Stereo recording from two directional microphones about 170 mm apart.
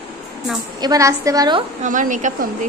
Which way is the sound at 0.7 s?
20° right (ahead or behind).